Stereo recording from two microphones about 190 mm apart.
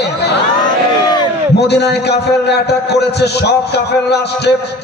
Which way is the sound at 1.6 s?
60° left (ahead or behind).